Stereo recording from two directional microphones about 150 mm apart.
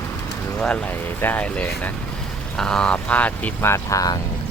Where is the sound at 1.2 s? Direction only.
10° left (ahead or behind).